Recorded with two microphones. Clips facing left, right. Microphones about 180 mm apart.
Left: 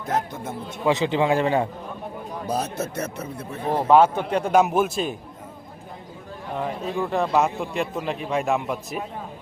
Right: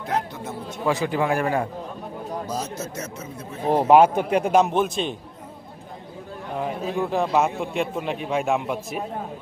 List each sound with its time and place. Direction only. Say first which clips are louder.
0.1 s speech: left 1 dB; 45° left (ahead or behind)
0.9 s a man's voice: left 2 dB; 20° left (ahead or behind)
2.5 s speech: left 3 dB; 60° left (ahead or behind)
3.7 s speech: right 2 dB; 15° right (ahead or behind)
4.5 s a man's voice: left 2 dB; 5° left (ahead or behind)
6.6 s a man's voice: right 1 dB; centre (ahead or behind)